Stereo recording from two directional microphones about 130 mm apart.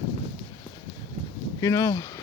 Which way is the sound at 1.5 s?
25° left (ahead or behind).